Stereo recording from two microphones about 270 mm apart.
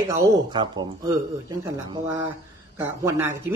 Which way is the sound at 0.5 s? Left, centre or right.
Centre.